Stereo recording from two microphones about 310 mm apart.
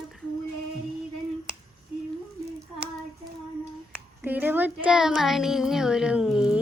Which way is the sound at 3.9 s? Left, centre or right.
Centre.